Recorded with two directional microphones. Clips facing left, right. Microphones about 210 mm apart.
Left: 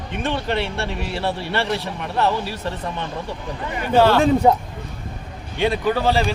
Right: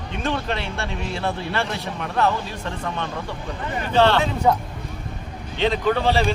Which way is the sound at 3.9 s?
10° left (ahead or behind).